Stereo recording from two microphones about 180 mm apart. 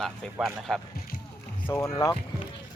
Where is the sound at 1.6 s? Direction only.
15° left (ahead or behind).